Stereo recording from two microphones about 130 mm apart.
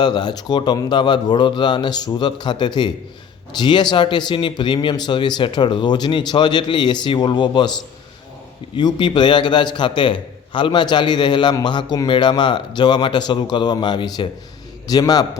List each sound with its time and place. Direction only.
0.0 s a man's voice: 35° left (ahead or behind)
8.7 s a man's voice: 35° left (ahead or behind)